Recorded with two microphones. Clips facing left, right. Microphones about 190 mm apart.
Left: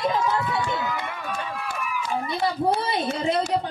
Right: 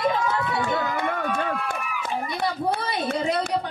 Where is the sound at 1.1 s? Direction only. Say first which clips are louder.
Right 6 dB; 60° right (ahead or behind).